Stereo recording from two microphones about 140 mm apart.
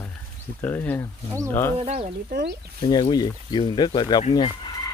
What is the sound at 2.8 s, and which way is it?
Speech, 30° left (ahead or behind).